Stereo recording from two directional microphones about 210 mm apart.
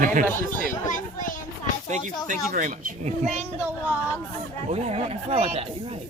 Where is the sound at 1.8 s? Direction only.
35° right (ahead or behind).